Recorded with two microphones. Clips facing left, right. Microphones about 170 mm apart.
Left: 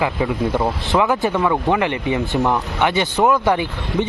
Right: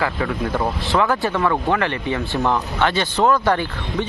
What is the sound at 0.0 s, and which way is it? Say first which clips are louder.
Speech: left 3 dB; 20° left (ahead or behind).